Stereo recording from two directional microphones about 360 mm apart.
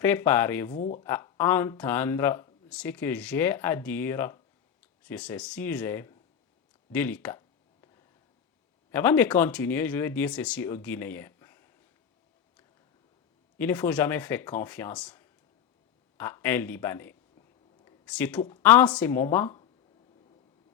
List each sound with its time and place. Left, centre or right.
0.0 s speech: centre
0.8 s speech: centre
1.0 s speech: centre
6.9 s a sound: centre
8.9 s speech: centre
13.6 s speech: centre